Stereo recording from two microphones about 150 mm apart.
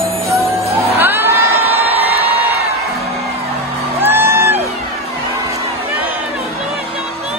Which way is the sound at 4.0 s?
15° right (ahead or behind).